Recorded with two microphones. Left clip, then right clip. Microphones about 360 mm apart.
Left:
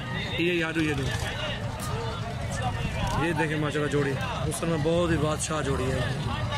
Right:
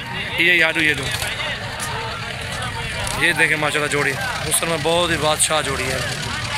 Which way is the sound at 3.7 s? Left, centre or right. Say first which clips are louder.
Right 8 dB; right.